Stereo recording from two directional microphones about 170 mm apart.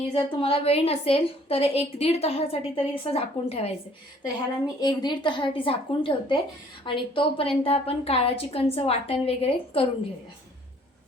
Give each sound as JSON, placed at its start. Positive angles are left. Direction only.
{"t": 0.1, "sound": "a woman's voice", "side_deg": 30}
{"t": 4.8, "sound": "a woman's voice", "side_deg": 25}